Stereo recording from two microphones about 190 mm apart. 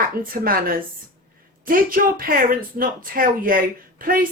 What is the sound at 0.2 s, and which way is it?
A woman's voice, 50° right (ahead or behind).